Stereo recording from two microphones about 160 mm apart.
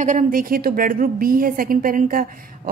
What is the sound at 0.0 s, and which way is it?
A woman's voice, 50° right (ahead or behind).